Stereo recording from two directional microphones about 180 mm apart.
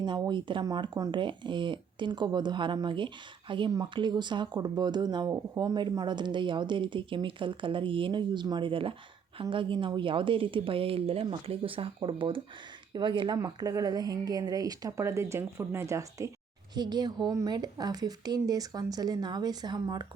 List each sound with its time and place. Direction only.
0.0 s speech: 25° right (ahead or behind)